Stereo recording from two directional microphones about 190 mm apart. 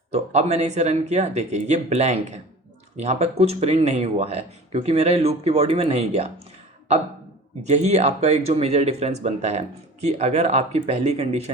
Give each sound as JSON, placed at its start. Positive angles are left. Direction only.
{"t": 0.1, "sound": "speech", "side_deg": -35}
{"t": 7.7, "sound": "speech", "side_deg": -35}